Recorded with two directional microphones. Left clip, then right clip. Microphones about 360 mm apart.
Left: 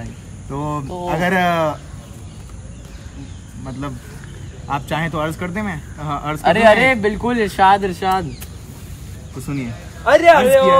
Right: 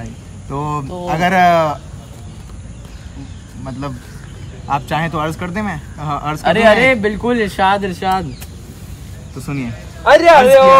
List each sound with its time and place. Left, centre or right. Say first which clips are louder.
0.5 s speech: right 3 dB; centre
4.6 s speech: right 4 dB; centre
10.0 s a man's voice: right 3 dB; right